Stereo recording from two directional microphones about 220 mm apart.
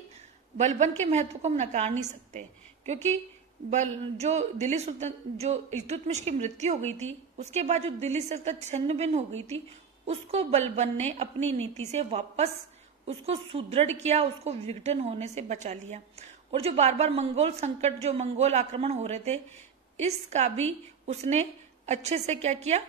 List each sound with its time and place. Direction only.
0.6 s a woman's voice: 30° right (ahead or behind)